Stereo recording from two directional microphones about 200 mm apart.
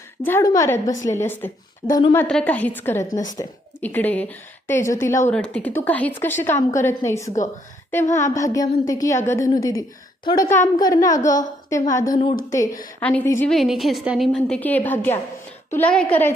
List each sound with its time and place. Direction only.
0.3 s a woman's voice: 15° left (ahead or behind)
2.2 s a woman's voice: 5° left (ahead or behind)
13.0 s a woman's voice: 5° left (ahead or behind)
13.5 s a woman's voice: centre (ahead or behind)